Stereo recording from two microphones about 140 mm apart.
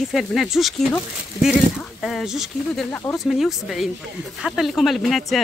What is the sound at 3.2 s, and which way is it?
Speech, centre (ahead or behind).